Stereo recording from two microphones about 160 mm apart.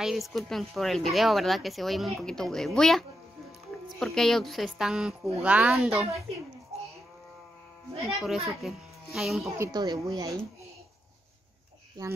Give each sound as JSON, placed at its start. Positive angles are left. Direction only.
{"t": 0.0, "sound": "speech", "side_deg": 0}
{"t": 8.1, "sound": "speech", "side_deg": 0}
{"t": 9.6, "sound": "speech", "side_deg": -25}